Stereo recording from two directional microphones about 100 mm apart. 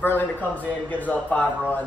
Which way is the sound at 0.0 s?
20° left (ahead or behind).